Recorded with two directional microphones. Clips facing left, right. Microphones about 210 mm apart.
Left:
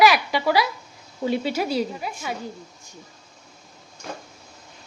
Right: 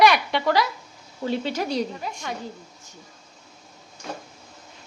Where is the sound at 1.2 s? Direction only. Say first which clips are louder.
Left 2 dB; 10° left (ahead or behind).